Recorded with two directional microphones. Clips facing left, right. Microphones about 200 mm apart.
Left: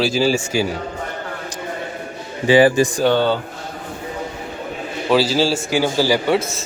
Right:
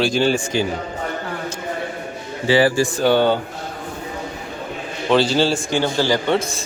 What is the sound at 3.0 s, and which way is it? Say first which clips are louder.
Speech: right 2 dB; 15° right (ahead or behind).